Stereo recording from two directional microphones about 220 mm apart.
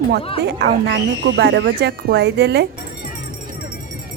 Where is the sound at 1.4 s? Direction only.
50° right (ahead or behind).